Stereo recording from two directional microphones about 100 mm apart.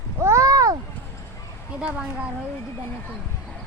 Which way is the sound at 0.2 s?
30° right (ahead or behind).